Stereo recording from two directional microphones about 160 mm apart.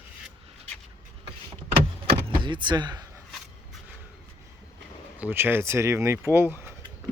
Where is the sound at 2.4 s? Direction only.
30° right (ahead or behind).